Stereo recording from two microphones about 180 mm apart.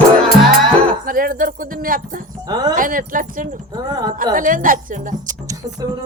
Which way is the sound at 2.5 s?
20° right (ahead or behind).